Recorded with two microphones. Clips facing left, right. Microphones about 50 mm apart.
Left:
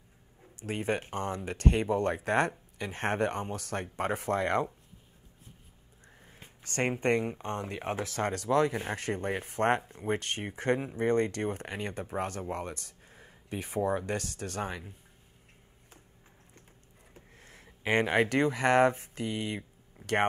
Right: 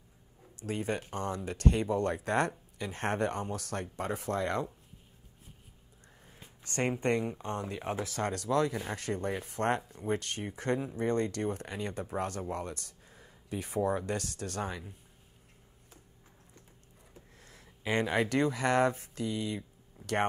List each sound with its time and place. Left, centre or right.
0.7 s speech: left
2.2 s speech: centre
3.8 s speech: left
6.8 s speech: centre
8.2 s speech: centre
8.5 s speech: left
12.1 s speech: centre
13.1 s a sound: left
13.7 s speech: centre
14.6 s speech: centre
17.1 s a sound: left
18.3 s speech: left